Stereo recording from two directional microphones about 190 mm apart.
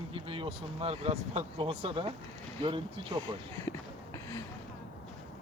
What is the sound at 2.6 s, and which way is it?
Speech, 25° right (ahead or behind).